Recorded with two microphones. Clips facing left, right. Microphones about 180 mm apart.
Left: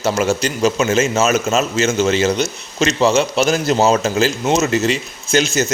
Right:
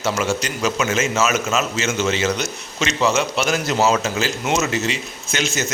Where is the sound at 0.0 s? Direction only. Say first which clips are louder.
Left 4 dB; 40° left (ahead or behind).